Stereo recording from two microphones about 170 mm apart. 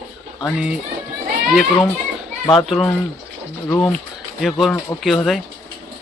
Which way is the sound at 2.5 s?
Centre (ahead or behind).